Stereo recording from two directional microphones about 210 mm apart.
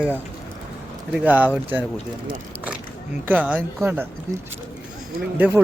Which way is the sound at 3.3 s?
5° right (ahead or behind).